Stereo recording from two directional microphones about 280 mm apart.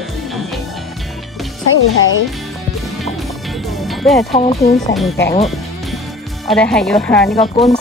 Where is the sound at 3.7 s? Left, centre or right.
Centre.